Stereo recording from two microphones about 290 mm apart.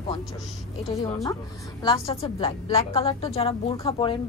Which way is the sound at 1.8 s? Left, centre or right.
Centre.